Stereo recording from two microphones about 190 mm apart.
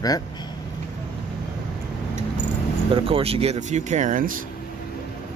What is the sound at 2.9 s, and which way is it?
Speech, 30° right (ahead or behind).